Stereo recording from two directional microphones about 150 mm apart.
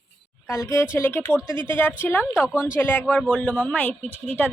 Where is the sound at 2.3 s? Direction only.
5° right (ahead or behind).